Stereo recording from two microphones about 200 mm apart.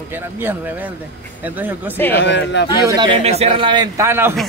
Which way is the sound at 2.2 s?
65° left (ahead or behind).